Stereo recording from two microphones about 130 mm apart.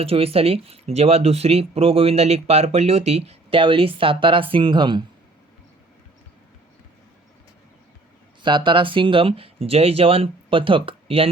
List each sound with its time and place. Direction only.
0.0 s speech: 50° right (ahead or behind)
8.4 s speech: 40° right (ahead or behind)